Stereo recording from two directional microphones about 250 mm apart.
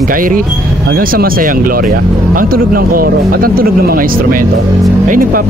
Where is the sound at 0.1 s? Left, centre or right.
Right.